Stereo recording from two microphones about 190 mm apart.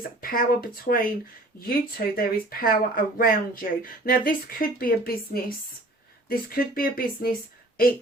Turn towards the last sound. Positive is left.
turn(degrees=50)  # may be behind; listen again after turning